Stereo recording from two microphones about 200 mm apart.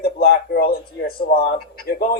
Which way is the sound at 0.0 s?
50° left (ahead or behind).